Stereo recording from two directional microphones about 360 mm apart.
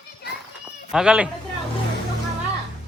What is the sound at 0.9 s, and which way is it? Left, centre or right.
Speech, centre.